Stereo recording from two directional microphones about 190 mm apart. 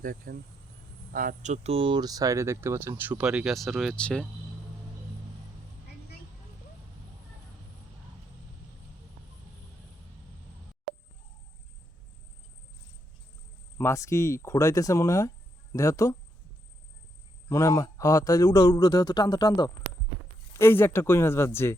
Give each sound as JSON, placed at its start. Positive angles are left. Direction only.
{"t": 0.0, "sound": "speech", "side_deg": -45}
{"t": 13.7, "sound": "speech", "side_deg": 15}
{"t": 17.5, "sound": "a man's voice", "side_deg": 15}